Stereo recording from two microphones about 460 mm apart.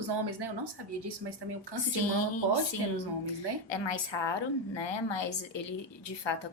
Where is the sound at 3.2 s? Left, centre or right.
Left.